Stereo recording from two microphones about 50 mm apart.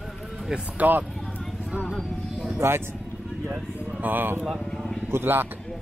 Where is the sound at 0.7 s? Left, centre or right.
Right.